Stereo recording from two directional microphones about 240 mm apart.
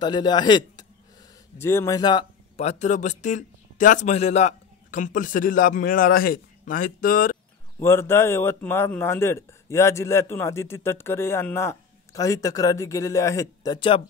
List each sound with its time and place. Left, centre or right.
0.0 s a man's voice: centre; by 7.3 s left
7.8 s a man's voice: centre